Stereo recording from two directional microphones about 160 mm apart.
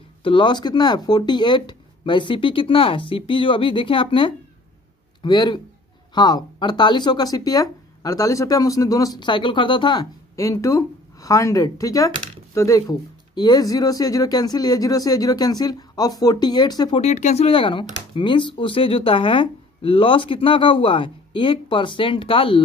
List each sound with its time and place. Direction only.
0.2 s speech: 30° left (ahead or behind)
17.0 s speech: 45° left (ahead or behind)